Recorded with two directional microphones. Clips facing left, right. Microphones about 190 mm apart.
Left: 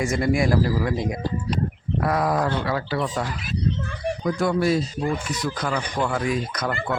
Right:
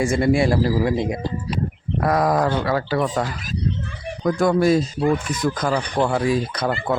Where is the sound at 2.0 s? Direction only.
40° right (ahead or behind).